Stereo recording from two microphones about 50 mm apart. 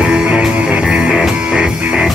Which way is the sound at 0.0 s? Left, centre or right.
Centre.